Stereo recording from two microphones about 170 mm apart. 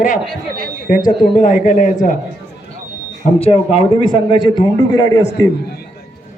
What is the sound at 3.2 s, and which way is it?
A man's voice, 35° left (ahead or behind).